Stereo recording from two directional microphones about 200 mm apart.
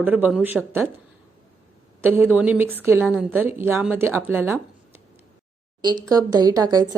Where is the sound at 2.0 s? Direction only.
10° right (ahead or behind).